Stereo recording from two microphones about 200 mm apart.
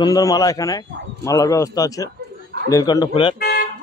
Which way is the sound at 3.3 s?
50° left (ahead or behind).